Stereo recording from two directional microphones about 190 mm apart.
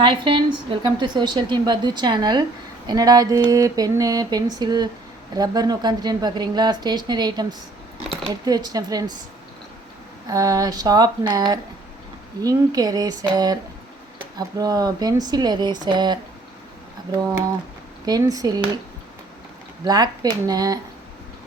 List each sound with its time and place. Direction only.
0.0 s a woman's voice: 25° right (ahead or behind)
10.2 s a woman's voice: 20° right (ahead or behind)
18.0 s a woman's voice: 20° right (ahead or behind)
19.8 s a woman's voice: 20° right (ahead or behind)